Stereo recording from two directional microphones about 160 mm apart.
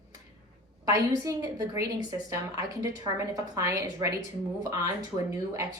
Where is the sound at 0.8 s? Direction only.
25° right (ahead or behind).